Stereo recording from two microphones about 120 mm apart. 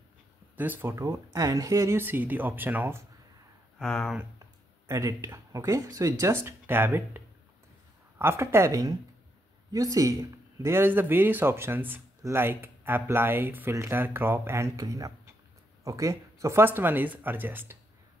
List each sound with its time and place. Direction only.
0.6 s speech: 15° right (ahead or behind)
0.9 s speech: 30° right (ahead or behind)
3.7 s speech: centre (ahead or behind)
4.8 s speech: 30° right (ahead or behind)